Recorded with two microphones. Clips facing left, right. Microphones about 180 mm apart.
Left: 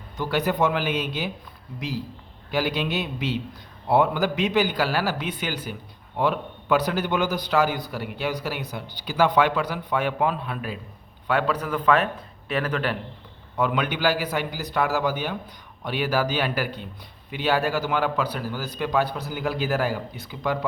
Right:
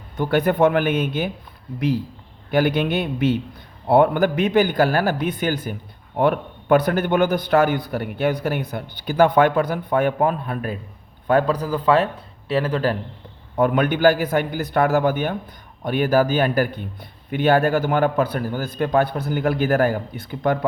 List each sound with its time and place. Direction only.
0.2 s a man's voice: 55° right (ahead or behind)
2.5 s a man's voice: 55° right (ahead or behind); by 13.0 s 35° right (ahead or behind)
13.6 s a man's voice: 50° right (ahead or behind)